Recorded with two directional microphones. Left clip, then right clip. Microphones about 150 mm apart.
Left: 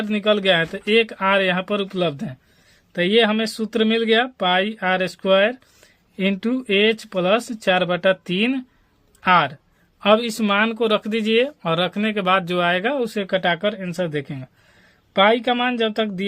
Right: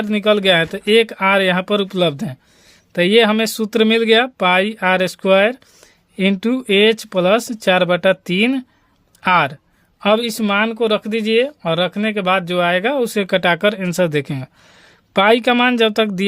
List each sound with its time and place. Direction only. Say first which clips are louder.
0.0 s speech: right 4 dB; 35° right (ahead or behind); by 16.2 s 50° right (ahead or behind)